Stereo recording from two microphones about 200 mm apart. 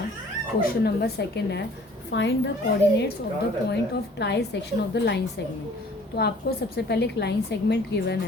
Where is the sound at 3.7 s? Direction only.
60° left (ahead or behind).